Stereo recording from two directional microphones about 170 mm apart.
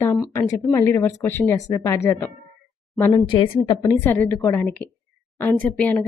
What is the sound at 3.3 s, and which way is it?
Speech, 30° left (ahead or behind).